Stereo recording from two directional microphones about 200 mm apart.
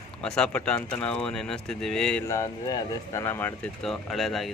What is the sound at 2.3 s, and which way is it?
Speech, 15° left (ahead or behind).